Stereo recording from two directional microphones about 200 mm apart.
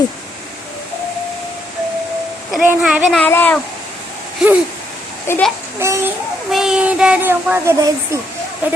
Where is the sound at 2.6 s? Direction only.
5° right (ahead or behind).